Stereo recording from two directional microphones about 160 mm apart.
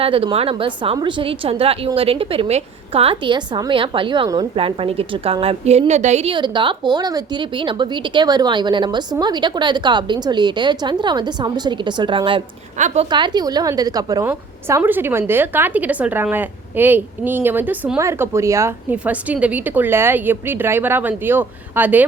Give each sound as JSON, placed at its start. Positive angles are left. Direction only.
{"t": 0.0, "sound": "a woman's voice", "side_deg": -35}
{"t": 6.3, "sound": "a woman's voice", "side_deg": -30}
{"t": 12.7, "sound": "a woman's voice", "side_deg": -50}
{"t": 13.1, "sound": "a woman's voice", "side_deg": -30}
{"t": 14.3, "sound": "a woman's voice", "side_deg": -10}